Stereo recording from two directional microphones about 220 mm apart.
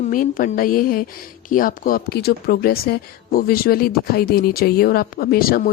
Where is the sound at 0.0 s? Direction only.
40° left (ahead or behind).